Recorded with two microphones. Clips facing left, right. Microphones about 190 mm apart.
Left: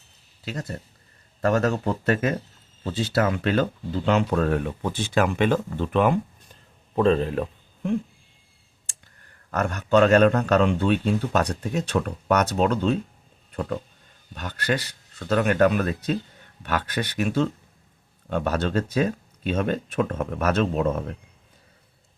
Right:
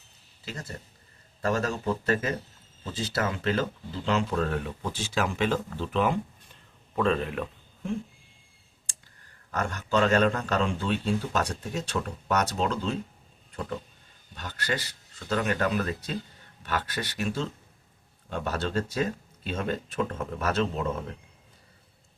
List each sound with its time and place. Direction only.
1.4 s speech: 65° left (ahead or behind)
6.5 s a sound: 35° left (ahead or behind)
9.5 s speech: 60° left (ahead or behind)
14.3 s speech: 60° left (ahead or behind)